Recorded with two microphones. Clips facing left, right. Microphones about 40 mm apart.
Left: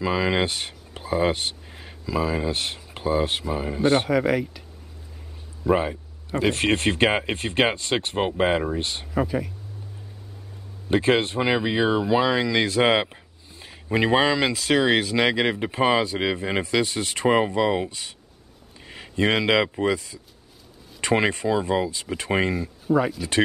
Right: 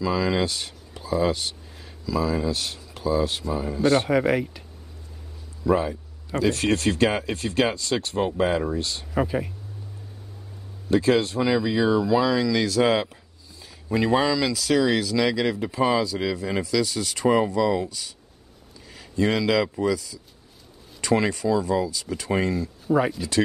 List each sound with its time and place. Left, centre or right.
0.0 s speech: left
4.1 s speech: centre
5.6 s speech: left
9.1 s speech: centre
10.9 s speech: left
22.9 s speech: centre